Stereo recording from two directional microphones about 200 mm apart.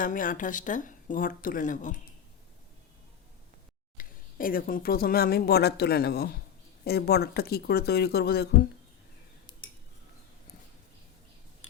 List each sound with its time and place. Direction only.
0.0 s speech: 45° left (ahead or behind)
3.9 s speech: 45° left (ahead or behind)